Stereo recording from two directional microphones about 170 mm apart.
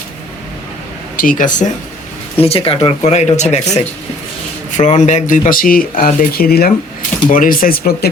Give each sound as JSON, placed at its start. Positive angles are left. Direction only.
{"t": 1.1, "sound": "speech", "side_deg": 55}
{"t": 2.4, "sound": "speech", "side_deg": 35}
{"t": 7.3, "sound": "speech", "side_deg": 50}